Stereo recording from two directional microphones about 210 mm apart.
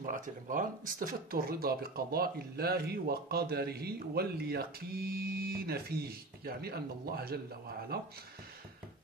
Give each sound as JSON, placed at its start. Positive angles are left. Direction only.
{"t": 0.0, "sound": "speech", "side_deg": -40}